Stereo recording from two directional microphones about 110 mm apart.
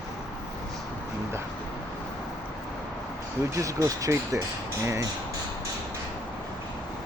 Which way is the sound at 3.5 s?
30° right (ahead or behind).